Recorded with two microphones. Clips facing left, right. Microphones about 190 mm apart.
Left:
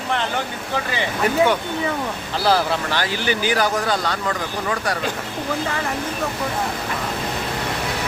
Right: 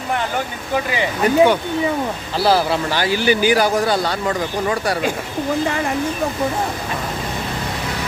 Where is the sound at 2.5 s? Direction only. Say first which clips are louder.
Right 2 dB; 10° right (ahead or behind).